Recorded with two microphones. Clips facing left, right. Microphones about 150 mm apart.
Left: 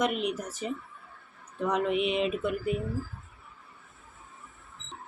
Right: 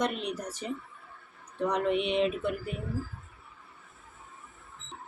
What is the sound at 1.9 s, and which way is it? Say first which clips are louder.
Speech: left 1 dB; 30° right (ahead or behind).